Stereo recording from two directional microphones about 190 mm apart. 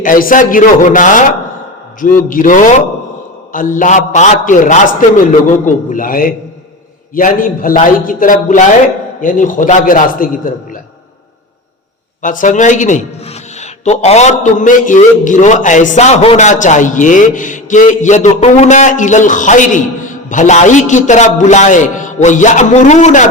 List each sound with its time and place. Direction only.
0.0 s a man's voice: 45° left (ahead or behind)
12.2 s a man's voice: 45° left (ahead or behind)